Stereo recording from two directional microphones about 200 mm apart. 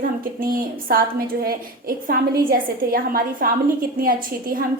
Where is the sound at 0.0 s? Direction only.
45° right (ahead or behind).